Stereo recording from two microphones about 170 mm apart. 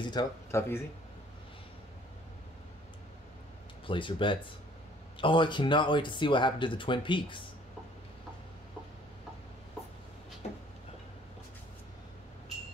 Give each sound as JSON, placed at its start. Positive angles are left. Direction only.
{"t": 0.0, "sound": "speech", "side_deg": 25}
{"t": 3.8, "sound": "speech", "side_deg": 30}